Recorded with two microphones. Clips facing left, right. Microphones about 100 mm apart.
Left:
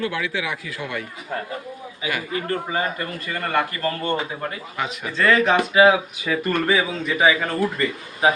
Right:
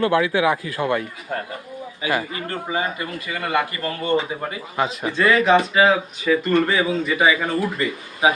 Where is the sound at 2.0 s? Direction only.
30° right (ahead or behind).